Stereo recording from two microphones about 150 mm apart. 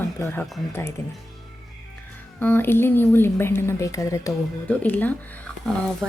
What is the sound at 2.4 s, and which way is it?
A woman's voice, 15° left (ahead or behind).